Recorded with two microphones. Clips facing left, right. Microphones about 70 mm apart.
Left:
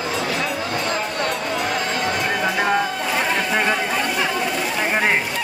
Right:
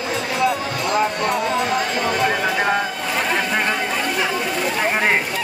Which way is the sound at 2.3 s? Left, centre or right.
Centre.